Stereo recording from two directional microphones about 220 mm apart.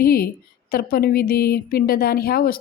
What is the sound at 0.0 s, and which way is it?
A woman's voice, 45° left (ahead or behind).